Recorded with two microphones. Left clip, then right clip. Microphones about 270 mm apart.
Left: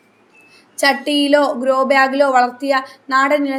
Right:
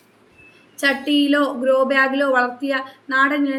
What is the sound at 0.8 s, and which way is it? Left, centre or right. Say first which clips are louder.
A woman's voice: left 3 dB; centre.